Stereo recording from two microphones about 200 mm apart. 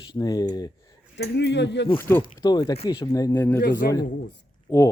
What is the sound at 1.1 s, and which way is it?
Speech, 60° left (ahead or behind).